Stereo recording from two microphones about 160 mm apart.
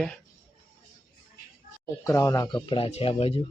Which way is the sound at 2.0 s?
20° left (ahead or behind).